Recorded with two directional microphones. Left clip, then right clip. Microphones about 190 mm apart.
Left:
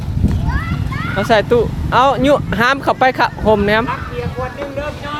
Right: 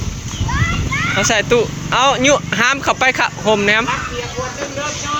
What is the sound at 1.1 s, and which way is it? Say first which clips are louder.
Speech: left 2 dB; 20° left (ahead or behind).